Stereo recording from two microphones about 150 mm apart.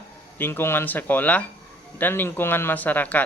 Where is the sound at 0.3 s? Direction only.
15° left (ahead or behind).